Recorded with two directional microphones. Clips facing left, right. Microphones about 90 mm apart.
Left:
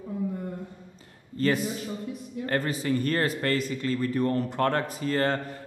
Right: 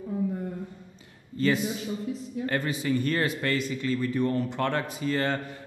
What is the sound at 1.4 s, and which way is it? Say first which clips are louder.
Speech: even; 45° left (ahead or behind).